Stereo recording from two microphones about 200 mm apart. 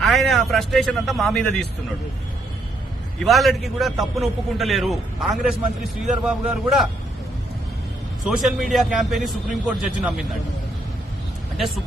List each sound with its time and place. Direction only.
0.0 s a man's voice: centre (ahead or behind)
3.2 s a man's voice: centre (ahead or behind)
8.3 s a man's voice: centre (ahead or behind)